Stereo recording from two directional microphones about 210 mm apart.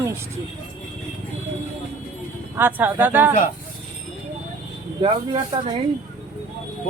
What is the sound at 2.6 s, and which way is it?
Speech, 10° right (ahead or behind).